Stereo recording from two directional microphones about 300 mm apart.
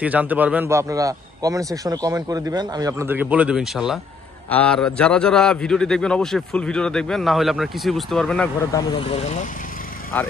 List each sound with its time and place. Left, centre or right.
0.0 s a man's voice: centre
9.1 s speech: left
10.1 s a man's voice: centre